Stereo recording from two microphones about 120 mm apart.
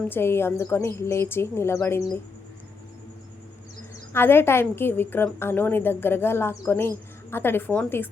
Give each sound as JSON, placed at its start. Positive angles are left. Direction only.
{"t": 0.1, "sound": "a woman's voice", "side_deg": 20}
{"t": 4.1, "sound": "a woman's voice", "side_deg": 20}